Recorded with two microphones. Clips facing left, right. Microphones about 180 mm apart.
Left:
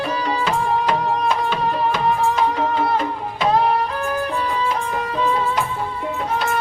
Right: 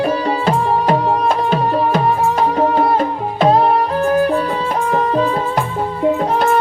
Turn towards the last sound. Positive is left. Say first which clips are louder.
# right 7 dB
turn(degrees=-45)  # may be behind; listen again after turning